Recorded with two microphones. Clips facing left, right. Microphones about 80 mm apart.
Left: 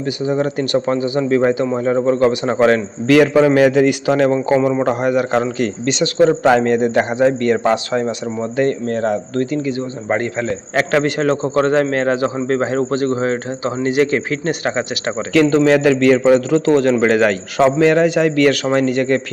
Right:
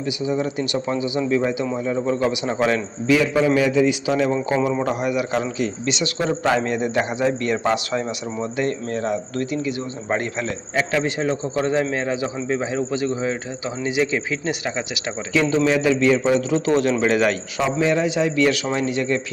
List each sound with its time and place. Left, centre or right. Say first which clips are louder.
0.3 s a man's voice: left 6 dB; left
3.1 s a man's voice: left 6 dB; left
10.8 s a man's voice: left 5 dB; left
15.3 s a man's voice: left 6 dB; left
17.6 s a man's voice: left 8 dB; left